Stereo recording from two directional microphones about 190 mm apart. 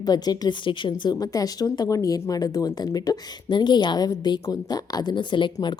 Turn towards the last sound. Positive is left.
turn(degrees=25)  # may be behind; listen again after turning